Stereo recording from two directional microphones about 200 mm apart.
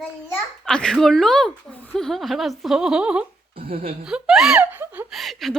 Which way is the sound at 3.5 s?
45° right (ahead or behind).